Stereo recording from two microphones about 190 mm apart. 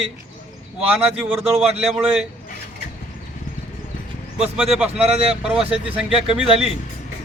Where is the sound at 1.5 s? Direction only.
30° right (ahead or behind).